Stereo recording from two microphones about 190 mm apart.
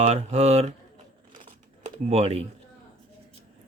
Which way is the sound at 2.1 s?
35° right (ahead or behind).